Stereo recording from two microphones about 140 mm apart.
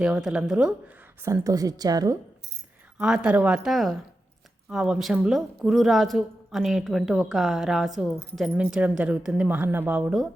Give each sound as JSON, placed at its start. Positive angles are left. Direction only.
{"t": 0.0, "sound": "a woman's voice", "side_deg": -5}
{"t": 1.2, "sound": "a woman's voice", "side_deg": -20}
{"t": 3.0, "sound": "a woman's voice", "side_deg": -5}